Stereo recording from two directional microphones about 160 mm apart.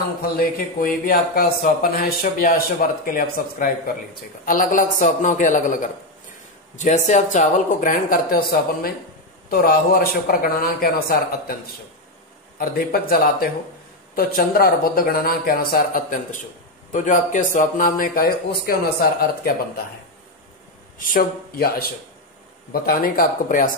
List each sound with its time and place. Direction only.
0.7 s speech: 65° left (ahead or behind)
12.5 s speech: 70° left (ahead or behind)
21.0 s speech: 65° left (ahead or behind)